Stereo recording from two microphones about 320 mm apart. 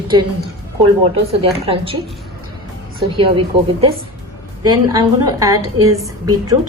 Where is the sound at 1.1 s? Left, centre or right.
Centre.